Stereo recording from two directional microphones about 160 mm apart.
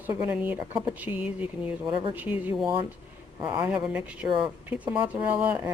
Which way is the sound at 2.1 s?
10° right (ahead or behind).